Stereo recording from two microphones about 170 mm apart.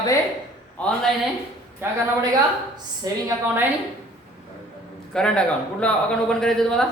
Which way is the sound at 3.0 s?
25° right (ahead or behind).